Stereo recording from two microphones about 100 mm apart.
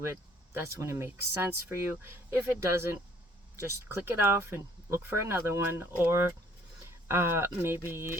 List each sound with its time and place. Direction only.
0.1 s speech: 25° right (ahead or behind)